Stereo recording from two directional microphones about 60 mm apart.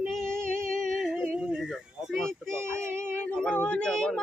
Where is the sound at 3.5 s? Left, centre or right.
Left.